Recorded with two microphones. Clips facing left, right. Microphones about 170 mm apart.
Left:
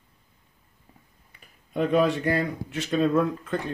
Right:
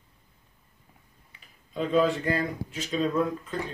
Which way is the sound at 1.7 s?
65° left (ahead or behind).